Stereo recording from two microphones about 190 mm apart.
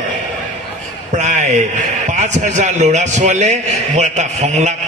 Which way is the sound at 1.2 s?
40° right (ahead or behind).